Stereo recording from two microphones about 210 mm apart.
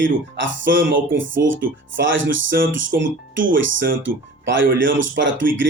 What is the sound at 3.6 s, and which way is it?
Speech, 65° right (ahead or behind).